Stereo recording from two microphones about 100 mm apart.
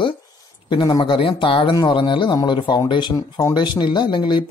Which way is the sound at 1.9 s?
50° left (ahead or behind).